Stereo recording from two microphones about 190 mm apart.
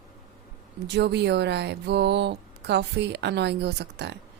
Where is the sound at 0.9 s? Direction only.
65° right (ahead or behind).